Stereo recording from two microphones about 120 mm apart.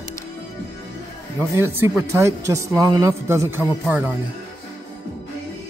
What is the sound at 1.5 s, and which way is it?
Speech, 25° right (ahead or behind).